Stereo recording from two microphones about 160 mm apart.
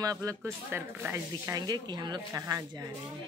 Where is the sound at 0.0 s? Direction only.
20° right (ahead or behind).